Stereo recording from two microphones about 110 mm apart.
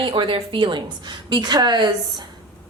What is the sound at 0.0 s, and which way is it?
A woman's voice, 50° right (ahead or behind).